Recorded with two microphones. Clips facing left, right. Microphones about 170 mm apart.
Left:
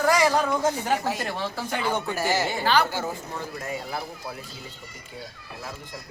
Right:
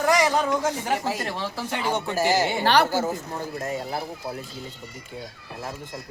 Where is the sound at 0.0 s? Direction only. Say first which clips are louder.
Even; 15° right (ahead or behind).